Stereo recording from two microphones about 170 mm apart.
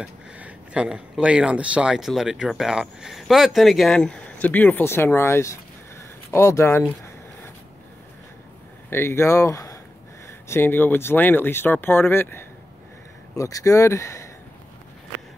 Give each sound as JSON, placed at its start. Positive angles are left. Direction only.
{"t": 0.0, "sound": "speech", "side_deg": -5}
{"t": 8.9, "sound": "speech", "side_deg": 15}